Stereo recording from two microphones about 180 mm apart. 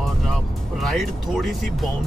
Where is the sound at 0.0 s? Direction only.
Centre (ahead or behind).